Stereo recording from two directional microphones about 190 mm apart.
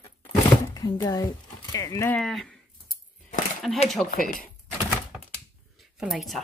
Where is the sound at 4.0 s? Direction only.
5° left (ahead or behind).